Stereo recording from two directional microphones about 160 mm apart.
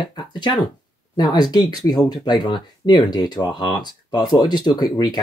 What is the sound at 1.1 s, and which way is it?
Speech, 25° left (ahead or behind).